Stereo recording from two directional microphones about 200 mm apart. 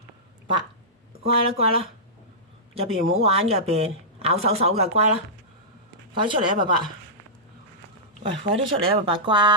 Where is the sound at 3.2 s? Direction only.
30° right (ahead or behind).